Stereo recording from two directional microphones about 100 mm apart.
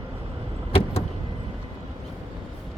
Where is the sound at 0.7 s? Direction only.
75° left (ahead or behind).